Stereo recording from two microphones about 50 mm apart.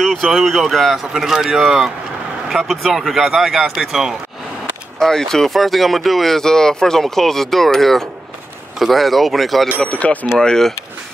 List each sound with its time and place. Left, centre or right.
0.0 s a sound: centre
0.3 s a man's voice: centre
4.9 s speech: centre
9.8 s speech: left
10.4 s speech: centre